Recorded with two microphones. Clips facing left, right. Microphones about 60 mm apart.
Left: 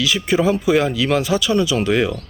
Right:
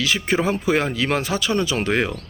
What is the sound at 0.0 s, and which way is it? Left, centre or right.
Speech, right.